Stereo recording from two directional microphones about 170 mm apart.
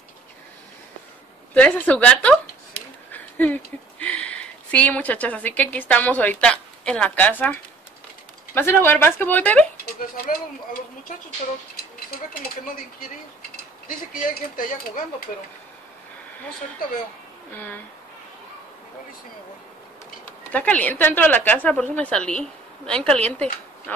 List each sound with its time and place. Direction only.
1.5 s speech: 10° left (ahead or behind)
3.1 s a sound: 10° left (ahead or behind)
4.0 s a woman's voice: 5° left (ahead or behind)
8.5 s speech: 10° left (ahead or behind)
10.1 s speech: 60° left (ahead or behind)
11.7 s a sound: 60° left (ahead or behind)
13.8 s speech: 55° left (ahead or behind)
20.2 s speech: 10° left (ahead or behind)